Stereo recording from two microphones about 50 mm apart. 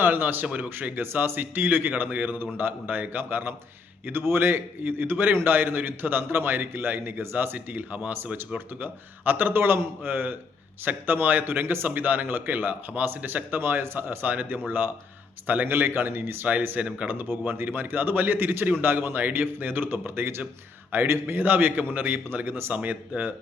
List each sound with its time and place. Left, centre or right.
0.0 s a man's voice: right
0.4 s speech: right
0.8 s a man's voice: right
14.3 s a man's voice: right
15.6 s a man's voice: right
16.5 s a man's voice: right
22.7 s a man's voice: right